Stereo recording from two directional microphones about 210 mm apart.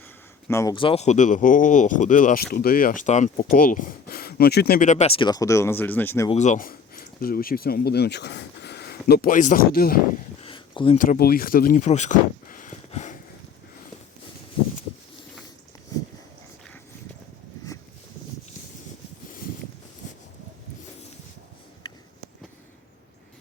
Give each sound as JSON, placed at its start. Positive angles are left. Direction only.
{"t": 0.4, "sound": "speech", "side_deg": 15}
{"t": 6.3, "sound": "speech", "side_deg": 35}
{"t": 10.4, "sound": "a sound", "side_deg": 25}
{"t": 10.9, "sound": "speech", "side_deg": 40}